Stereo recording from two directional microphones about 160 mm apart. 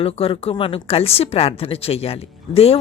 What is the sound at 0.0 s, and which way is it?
A woman's voice, 35° left (ahead or behind).